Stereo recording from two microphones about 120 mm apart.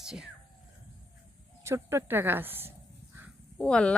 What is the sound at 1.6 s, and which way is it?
Speech, 20° right (ahead or behind).